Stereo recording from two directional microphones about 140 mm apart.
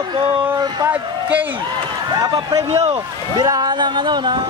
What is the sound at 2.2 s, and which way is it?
Speech, 25° right (ahead or behind).